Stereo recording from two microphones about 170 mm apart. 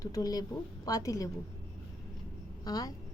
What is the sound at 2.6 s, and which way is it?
Speech, 20° left (ahead or behind).